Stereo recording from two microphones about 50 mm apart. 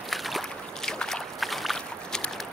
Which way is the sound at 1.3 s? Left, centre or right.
Centre.